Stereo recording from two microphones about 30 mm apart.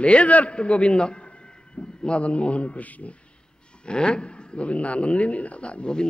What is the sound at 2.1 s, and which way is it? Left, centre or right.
A man's voice, left.